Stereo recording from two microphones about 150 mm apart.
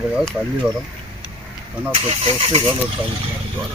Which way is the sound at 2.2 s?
35° right (ahead or behind).